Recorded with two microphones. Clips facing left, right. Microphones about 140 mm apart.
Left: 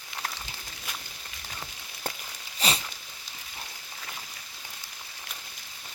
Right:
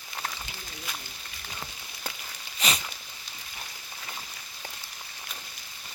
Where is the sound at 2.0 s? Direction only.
50° left (ahead or behind).